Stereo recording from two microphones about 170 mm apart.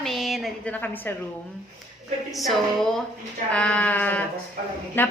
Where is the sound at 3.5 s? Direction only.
5° left (ahead or behind).